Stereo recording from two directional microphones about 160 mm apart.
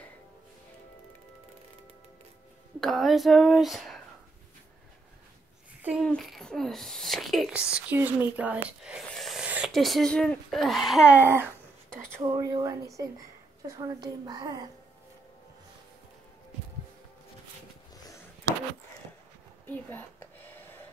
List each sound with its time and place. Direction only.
2.8 s speech: centre (ahead or behind)
6.0 s speech: 5° left (ahead or behind); by 14.7 s 25° right (ahead or behind)
19.6 s a sound: 10° left (ahead or behind)